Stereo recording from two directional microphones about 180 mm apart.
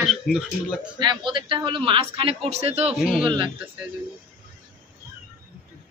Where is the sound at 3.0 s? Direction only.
5° right (ahead or behind).